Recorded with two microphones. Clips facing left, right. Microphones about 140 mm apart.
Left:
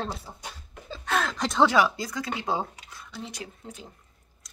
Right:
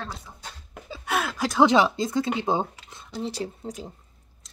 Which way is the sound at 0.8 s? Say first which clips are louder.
Even; 10° right (ahead or behind).